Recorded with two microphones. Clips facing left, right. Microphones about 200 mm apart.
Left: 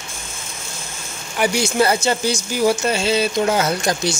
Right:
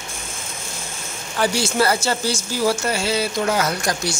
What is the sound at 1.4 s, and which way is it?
Speech, 15° left (ahead or behind).